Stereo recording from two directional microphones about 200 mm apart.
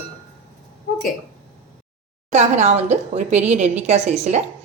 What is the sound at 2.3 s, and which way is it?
A woman's voice, 35° right (ahead or behind).